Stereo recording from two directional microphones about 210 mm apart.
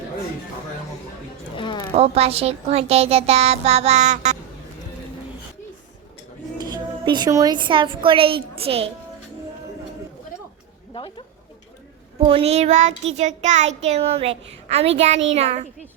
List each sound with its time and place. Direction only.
1.5 s a sound: 20° left (ahead or behind)
1.9 s a child's voice: 30° right (ahead or behind)
6.6 s a woman's voice: 20° right (ahead or behind)
12.2 s child singing: 30° right (ahead or behind)